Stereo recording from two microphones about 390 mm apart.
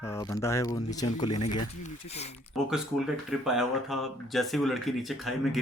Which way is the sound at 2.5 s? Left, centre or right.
Centre.